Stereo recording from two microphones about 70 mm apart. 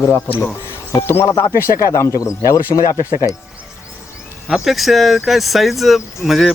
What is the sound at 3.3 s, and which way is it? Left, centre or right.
Speech, right.